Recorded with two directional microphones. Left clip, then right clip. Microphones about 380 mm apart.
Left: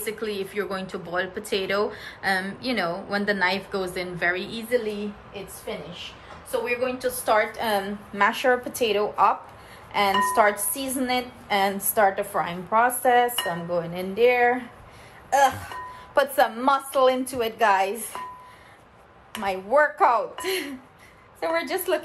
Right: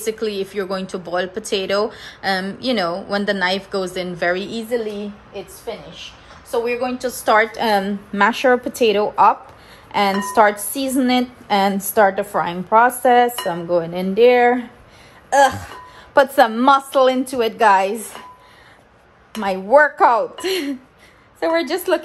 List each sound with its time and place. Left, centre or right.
0.0 s a woman's voice: centre
6.5 s a woman's voice: centre; by 14.6 s right
15.2 s music: right
16.2 s a woman's voice: right
19.4 s a woman's voice: right